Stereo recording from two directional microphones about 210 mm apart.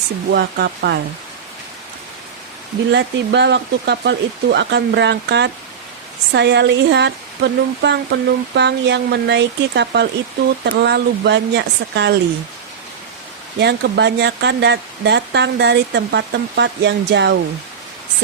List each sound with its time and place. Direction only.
0.3 s speech: 50° right (ahead or behind)
2.9 s speech: 55° right (ahead or behind)
13.6 s speech: 55° right (ahead or behind)